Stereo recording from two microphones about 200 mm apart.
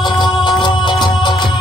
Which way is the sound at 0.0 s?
20° left (ahead or behind).